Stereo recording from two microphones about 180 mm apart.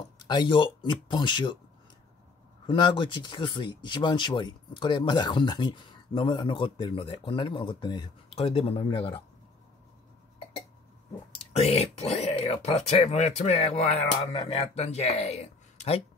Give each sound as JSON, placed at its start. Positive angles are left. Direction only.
{"t": 0.2, "sound": "speech", "side_deg": 25}
{"t": 2.6, "sound": "speech", "side_deg": 25}
{"t": 11.3, "sound": "speech", "side_deg": 35}